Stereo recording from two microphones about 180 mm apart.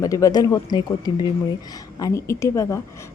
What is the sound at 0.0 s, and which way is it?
A woman's voice, 20° left (ahead or behind).